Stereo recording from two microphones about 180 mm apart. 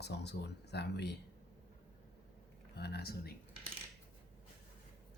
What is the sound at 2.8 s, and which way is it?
Speech, 65° left (ahead or behind).